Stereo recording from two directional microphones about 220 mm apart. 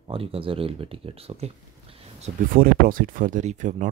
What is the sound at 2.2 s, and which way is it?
Speech, 40° right (ahead or behind).